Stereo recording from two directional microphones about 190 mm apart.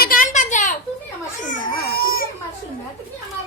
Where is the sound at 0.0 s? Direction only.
45° left (ahead or behind).